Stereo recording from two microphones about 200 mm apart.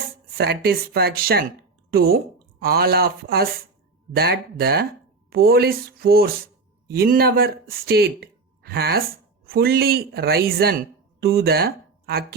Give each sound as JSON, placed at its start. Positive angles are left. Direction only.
{"t": 0.3, "sound": "speech", "side_deg": -50}